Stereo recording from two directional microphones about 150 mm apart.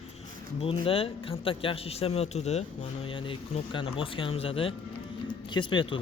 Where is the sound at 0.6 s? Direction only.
40° left (ahead or behind).